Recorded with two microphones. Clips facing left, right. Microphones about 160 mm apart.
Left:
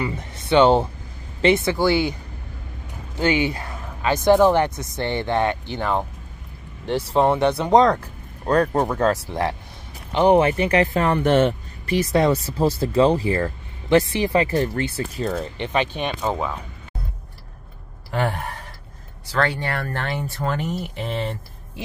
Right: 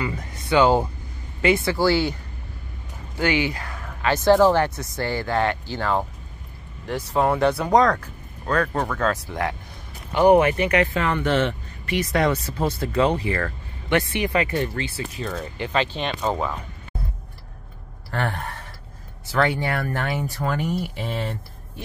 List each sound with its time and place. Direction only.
0.0 s a sound: 25° left (ahead or behind)
1.4 s speech: 20° left (ahead or behind)
3.2 s speech: 25° left (ahead or behind)
6.9 s speech: 30° left (ahead or behind)
18.1 s speech: 15° left (ahead or behind)
18.4 s speech: centre (ahead or behind)
19.3 s speech: 15° right (ahead or behind)